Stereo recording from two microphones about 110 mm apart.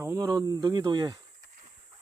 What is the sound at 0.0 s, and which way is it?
Speech, 30° right (ahead or behind).